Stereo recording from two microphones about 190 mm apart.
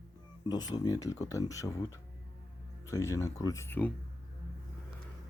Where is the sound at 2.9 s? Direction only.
15° left (ahead or behind).